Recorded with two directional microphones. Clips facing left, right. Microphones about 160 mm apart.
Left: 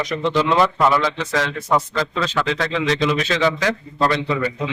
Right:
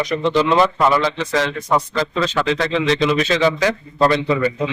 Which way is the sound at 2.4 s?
Centre (ahead or behind).